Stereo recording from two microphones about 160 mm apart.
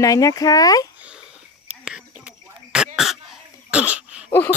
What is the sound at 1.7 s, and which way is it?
Whispering, 5° right (ahead or behind).